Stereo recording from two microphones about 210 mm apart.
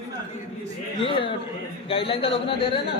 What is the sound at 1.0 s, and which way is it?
A man's voice, 25° left (ahead or behind).